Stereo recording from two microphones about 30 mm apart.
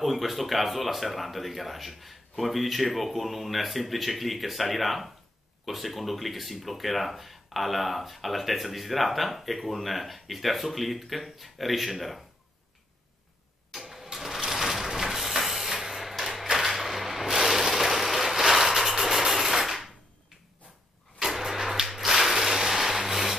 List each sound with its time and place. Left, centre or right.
0.0 s speech: centre
13.7 s engine starting: centre
14.1 s sewing machine: centre
14.5 s printer: centre
16.4 s a sound: centre
16.7 s vehicle: centre
21.2 s vehicle: centre
21.8 s a sound: centre